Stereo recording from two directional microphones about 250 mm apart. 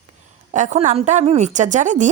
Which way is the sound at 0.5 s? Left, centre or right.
Right.